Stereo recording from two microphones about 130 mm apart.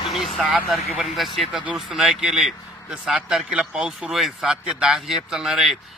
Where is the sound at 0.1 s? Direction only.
Centre (ahead or behind).